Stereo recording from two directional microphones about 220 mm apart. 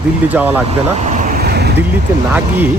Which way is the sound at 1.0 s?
35° right (ahead or behind).